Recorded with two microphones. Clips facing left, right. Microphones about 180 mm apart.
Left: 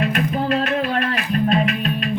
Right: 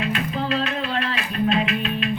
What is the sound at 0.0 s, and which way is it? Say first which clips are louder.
Music: left 4 dB; 50° left (ahead or behind).